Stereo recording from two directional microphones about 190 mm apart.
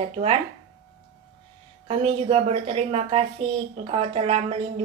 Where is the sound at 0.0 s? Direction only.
30° right (ahead or behind).